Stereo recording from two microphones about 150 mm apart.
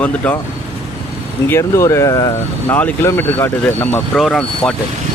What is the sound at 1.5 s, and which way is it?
Speech, 20° left (ahead or behind).